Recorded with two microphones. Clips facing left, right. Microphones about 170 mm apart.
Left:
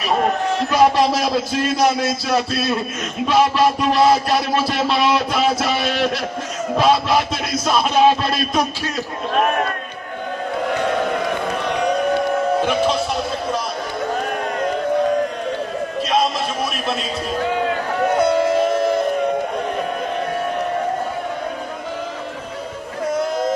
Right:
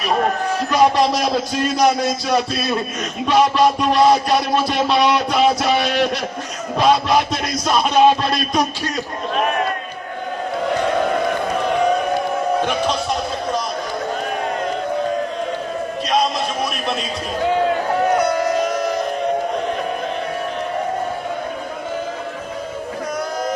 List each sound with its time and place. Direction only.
0.7 s speech: centre (ahead or behind)
18.2 s music: 25° left (ahead or behind)
23.1 s a sound: 25° left (ahead or behind)